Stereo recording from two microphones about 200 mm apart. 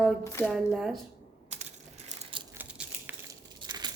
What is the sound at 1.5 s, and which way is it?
Crushing, 35° right (ahead or behind).